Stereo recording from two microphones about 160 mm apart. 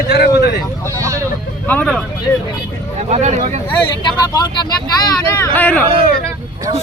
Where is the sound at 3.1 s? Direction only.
45° right (ahead or behind).